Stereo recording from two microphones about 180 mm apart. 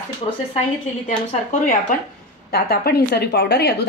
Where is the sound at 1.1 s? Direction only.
40° left (ahead or behind).